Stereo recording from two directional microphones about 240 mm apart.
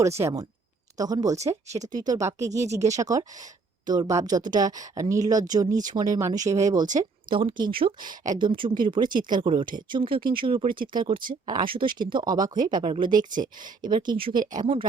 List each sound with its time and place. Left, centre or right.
0.2 s speech: centre